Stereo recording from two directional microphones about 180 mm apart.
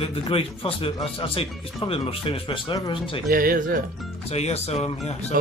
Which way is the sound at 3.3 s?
50° right (ahead or behind).